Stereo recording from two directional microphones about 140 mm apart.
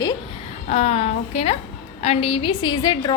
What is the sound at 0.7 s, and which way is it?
A woman's voice, 50° left (ahead or behind).